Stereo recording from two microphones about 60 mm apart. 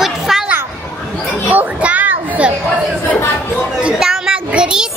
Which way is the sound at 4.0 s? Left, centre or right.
Centre.